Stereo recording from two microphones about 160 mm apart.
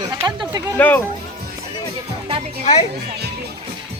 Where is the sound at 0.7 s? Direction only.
10° left (ahead or behind).